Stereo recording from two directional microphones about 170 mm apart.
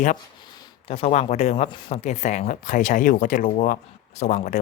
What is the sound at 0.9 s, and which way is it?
Speech, 40° left (ahead or behind).